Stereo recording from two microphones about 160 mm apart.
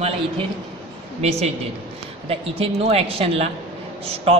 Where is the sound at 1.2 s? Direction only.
40° right (ahead or behind).